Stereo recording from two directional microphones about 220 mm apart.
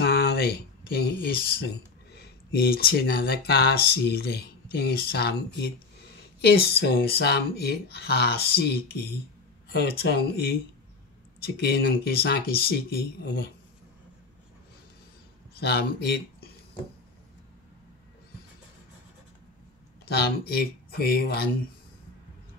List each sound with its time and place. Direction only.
0.0 s speech: 50° left (ahead or behind)
15.5 s speech: 45° left (ahead or behind)
20.1 s speech: 45° left (ahead or behind)